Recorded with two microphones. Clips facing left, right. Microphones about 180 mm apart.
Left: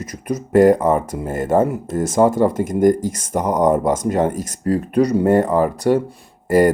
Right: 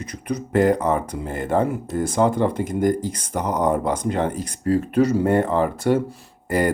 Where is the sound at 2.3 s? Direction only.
45° left (ahead or behind).